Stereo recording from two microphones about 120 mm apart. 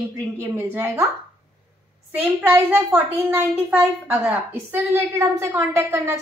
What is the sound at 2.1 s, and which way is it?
A child's voice, 15° right (ahead or behind).